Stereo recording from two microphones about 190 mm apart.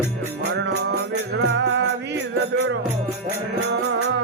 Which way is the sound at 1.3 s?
65° right (ahead or behind).